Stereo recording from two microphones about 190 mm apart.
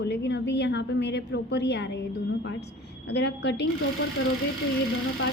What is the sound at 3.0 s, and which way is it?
Speech, 65° left (ahead or behind).